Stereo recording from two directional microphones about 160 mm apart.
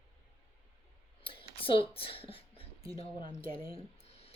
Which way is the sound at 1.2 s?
35° left (ahead or behind).